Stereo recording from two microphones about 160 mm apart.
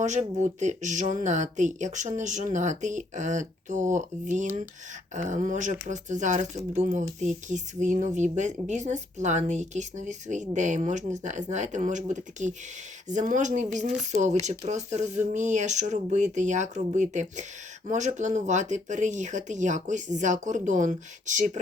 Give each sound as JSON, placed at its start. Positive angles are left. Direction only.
{"t": 0.0, "sound": "speech", "side_deg": -45}